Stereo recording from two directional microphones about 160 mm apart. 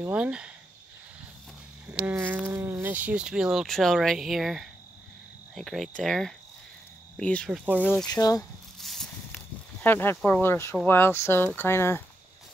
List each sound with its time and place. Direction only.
0.0 s speech: 10° right (ahead or behind)
1.9 s a sound: 10° right (ahead or behind)
2.4 s speech: 15° right (ahead or behind); by 7.6 s 5° left (ahead or behind)
7.6 s speech: 10° right (ahead or behind)
8.1 s speech: 20° left (ahead or behind)
8.7 s a sound: centre (ahead or behind)
10.9 s speech: 15° left (ahead or behind)